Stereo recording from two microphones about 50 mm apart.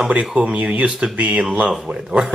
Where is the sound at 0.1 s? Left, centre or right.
Right.